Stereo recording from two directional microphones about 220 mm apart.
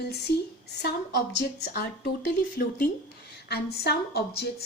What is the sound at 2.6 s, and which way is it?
Speech, 45° left (ahead or behind).